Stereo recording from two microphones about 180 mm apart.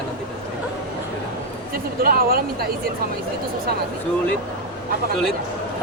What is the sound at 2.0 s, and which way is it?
Speech, 55° right (ahead or behind).